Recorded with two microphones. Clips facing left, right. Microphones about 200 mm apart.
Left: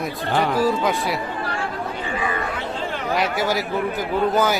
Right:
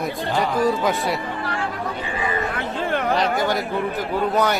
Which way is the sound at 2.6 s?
55° right (ahead or behind).